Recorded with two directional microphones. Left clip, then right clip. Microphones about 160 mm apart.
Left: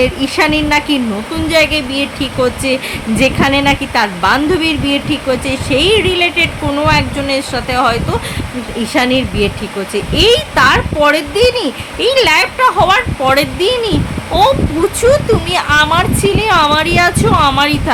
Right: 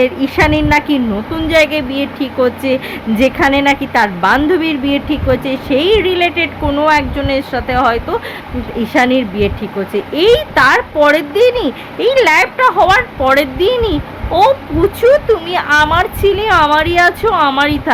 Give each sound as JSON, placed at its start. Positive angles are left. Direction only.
{"t": 0.0, "sound": "a woman's voice", "side_deg": 15}